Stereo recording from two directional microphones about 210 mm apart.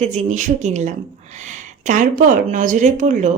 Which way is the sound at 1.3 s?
35° right (ahead or behind).